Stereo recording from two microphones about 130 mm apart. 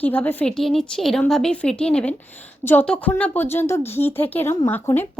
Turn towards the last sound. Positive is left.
turn(degrees=15)  # may be behind; listen again after turning